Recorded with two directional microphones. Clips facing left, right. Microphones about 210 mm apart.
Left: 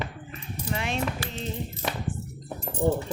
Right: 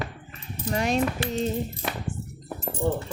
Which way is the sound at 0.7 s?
40° right (ahead or behind).